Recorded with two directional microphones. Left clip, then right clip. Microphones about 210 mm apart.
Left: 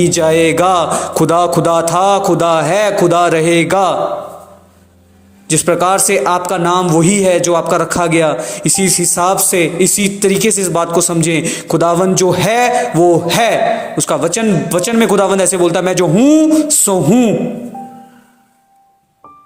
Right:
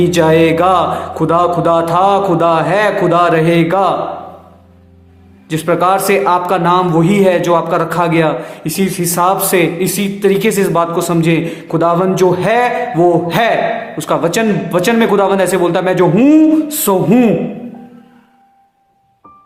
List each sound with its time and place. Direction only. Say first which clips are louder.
0.0 s a man's voice: right 1 dB; 25° left (ahead or behind)
5.5 s a man's voice: even; 25° left (ahead or behind)